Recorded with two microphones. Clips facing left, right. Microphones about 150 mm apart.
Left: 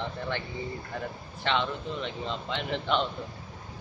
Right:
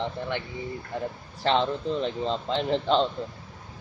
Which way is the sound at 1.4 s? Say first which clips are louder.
Right 5 dB; 35° right (ahead or behind).